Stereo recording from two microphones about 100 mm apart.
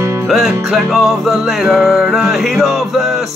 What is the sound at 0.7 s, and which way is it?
Music, 5° right (ahead or behind).